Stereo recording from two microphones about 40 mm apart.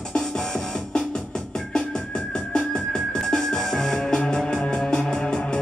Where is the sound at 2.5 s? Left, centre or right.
Centre.